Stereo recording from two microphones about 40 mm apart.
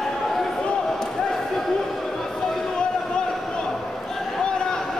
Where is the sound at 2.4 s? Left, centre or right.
Centre.